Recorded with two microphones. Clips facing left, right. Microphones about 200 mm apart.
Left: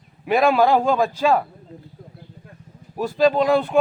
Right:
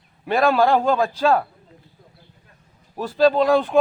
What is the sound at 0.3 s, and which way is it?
Speech, 5° left (ahead or behind).